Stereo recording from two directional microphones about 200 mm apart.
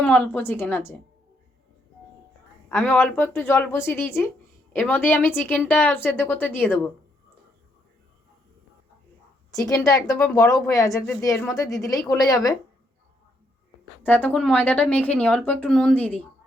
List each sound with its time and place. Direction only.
0.0 s speech: 10° left (ahead or behind)
2.6 s speech: 10° left (ahead or behind)
9.6 s speech: 15° left (ahead or behind)
14.0 s speech: 10° left (ahead or behind)